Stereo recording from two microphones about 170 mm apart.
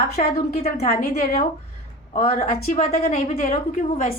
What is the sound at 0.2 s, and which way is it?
Speech, 45° left (ahead or behind).